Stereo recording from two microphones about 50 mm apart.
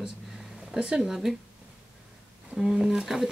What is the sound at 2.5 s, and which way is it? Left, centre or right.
Speech, centre.